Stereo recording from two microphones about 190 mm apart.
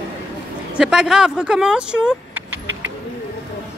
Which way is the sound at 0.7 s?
5° right (ahead or behind).